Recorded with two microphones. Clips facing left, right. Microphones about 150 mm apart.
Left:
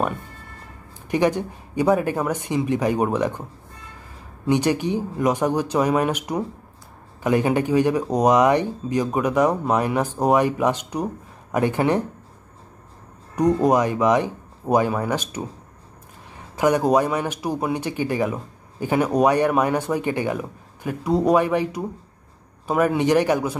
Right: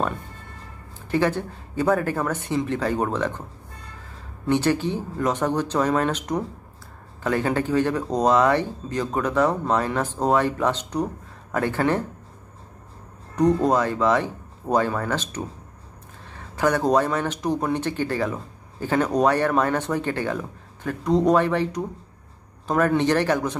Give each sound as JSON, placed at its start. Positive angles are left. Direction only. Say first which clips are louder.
{"t": 1.1, "sound": "speech", "louder": "left 2 dB", "side_deg": 15}
{"t": 4.5, "sound": "speech", "louder": "left 1 dB", "side_deg": 15}
{"t": 13.4, "sound": "speech", "louder": "left 1 dB", "side_deg": 10}